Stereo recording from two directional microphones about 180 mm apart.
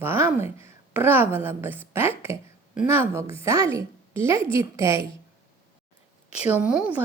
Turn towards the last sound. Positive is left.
turn(degrees=-5)  # may be behind; listen again after turning